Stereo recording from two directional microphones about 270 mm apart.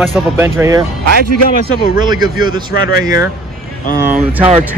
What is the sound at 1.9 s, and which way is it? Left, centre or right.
Speech, centre.